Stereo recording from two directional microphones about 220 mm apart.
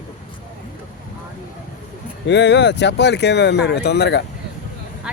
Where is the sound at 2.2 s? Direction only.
55° left (ahead or behind).